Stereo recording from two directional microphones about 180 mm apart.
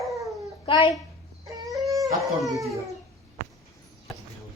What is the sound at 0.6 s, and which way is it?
Speech, 30° left (ahead or behind).